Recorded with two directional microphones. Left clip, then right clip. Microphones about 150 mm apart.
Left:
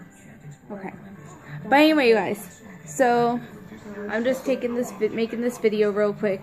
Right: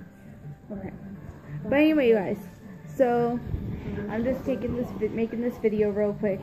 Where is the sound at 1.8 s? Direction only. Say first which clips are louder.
Left 3 dB; 20° left (ahead or behind).